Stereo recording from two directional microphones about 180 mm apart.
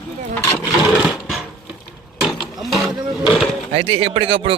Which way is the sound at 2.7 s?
Centre (ahead or behind).